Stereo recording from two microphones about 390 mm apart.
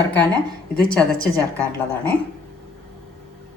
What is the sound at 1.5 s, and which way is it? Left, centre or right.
Speech, centre.